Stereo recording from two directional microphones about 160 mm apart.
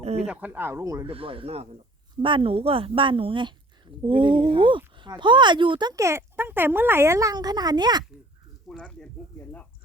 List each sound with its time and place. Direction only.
0.0 s speech: 40° right (ahead or behind)
0.3 s speech: 10° right (ahead or behind)
1.0 s a woman's voice: 35° right (ahead or behind)
8.6 s speech: 5° left (ahead or behind)